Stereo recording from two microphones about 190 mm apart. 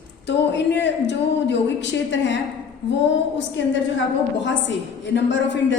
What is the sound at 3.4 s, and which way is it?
A woman's voice, 70° left (ahead or behind).